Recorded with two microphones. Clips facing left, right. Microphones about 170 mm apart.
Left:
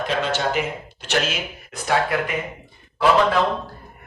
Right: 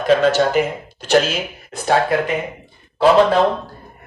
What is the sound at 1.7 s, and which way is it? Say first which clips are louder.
Speech: right 5 dB; 30° right (ahead or behind).